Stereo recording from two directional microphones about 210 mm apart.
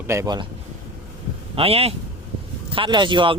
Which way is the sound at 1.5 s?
30° right (ahead or behind).